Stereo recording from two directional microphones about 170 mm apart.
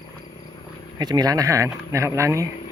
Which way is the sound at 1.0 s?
25° right (ahead or behind).